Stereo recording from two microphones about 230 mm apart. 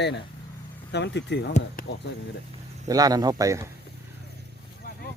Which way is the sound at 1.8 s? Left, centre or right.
Left.